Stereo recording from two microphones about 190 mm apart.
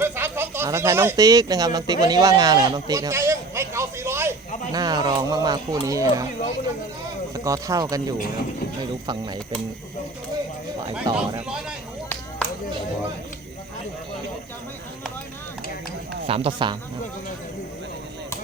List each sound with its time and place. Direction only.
0.0 s speech: 10° right (ahead or behind)
7.3 s speech: 15° right (ahead or behind)
9.0 s speech: 25° right (ahead or behind)
11.1 s speech: 20° right (ahead or behind)
16.2 s speech: 30° right (ahead or behind)